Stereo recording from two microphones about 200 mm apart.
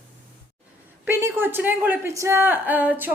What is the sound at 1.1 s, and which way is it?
A woman's voice, 15° right (ahead or behind).